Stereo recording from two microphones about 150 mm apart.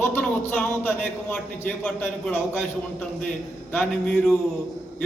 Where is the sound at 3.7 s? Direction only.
5° left (ahead or behind).